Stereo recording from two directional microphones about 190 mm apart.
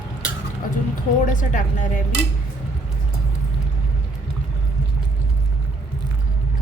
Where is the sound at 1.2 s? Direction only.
40° left (ahead or behind).